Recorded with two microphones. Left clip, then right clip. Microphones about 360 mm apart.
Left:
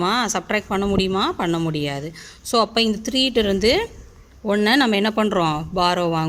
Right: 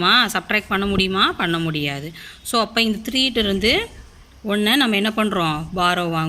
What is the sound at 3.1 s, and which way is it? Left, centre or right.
Speech, left.